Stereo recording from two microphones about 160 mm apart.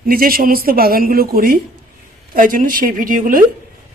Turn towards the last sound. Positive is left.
turn(degrees=-60)  # may be behind; listen again after turning